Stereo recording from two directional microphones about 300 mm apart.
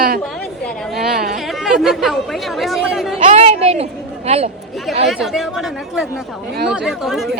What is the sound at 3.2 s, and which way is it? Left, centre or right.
Speech, right.